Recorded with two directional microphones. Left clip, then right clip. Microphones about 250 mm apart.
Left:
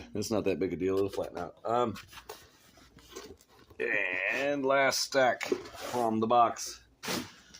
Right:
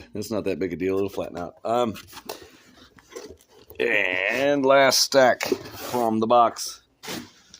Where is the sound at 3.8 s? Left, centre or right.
Right.